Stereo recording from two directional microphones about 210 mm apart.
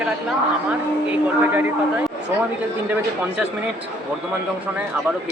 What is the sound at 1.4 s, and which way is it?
Speech, 10° right (ahead or behind).